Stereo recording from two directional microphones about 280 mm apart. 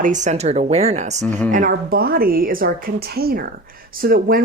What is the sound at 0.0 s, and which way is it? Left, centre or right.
A woman's voice, right.